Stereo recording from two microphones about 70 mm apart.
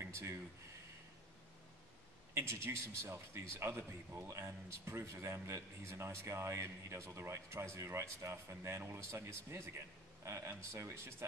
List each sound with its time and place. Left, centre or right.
0.0 s speech: right
2.3 s a man's voice: right